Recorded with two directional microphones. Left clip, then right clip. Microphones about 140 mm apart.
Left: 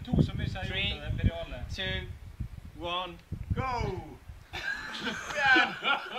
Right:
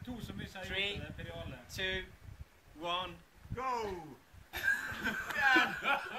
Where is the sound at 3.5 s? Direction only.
40° left (ahead or behind).